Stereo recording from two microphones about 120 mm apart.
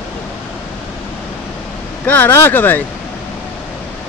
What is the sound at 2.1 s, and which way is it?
Speech, 15° left (ahead or behind).